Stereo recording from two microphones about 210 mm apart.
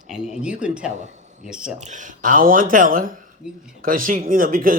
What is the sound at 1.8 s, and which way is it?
Speech, 35° right (ahead or behind).